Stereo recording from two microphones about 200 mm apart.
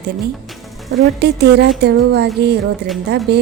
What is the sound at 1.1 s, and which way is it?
A woman's voice, 55° right (ahead or behind).